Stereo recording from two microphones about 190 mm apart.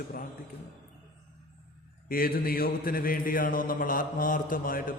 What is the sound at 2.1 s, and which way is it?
A man's voice, 50° left (ahead or behind).